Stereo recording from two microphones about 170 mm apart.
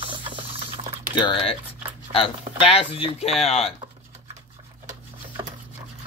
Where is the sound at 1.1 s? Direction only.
30° left (ahead or behind).